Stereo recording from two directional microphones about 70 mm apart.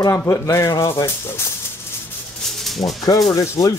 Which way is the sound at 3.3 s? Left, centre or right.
Left.